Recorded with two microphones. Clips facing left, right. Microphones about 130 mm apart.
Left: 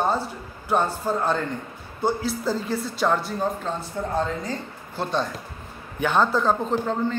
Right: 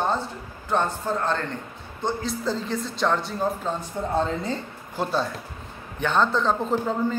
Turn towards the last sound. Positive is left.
turn(degrees=0)  # may be behind; listen again after turning